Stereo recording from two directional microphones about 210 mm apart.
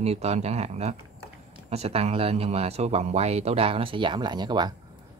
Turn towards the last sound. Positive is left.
turn(degrees=-20)  # may be behind; listen again after turning